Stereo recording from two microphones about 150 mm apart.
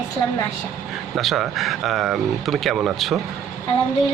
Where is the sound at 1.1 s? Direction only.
Centre (ahead or behind).